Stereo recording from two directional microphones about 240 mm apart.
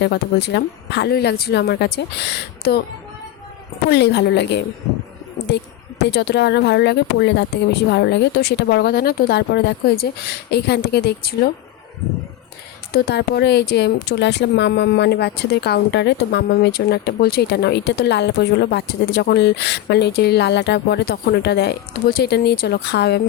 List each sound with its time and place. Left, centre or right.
0.0 s speech: left
3.8 s speech: left
12.9 s speech: left